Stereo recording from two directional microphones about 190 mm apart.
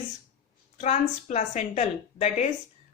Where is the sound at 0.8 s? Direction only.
35° left (ahead or behind).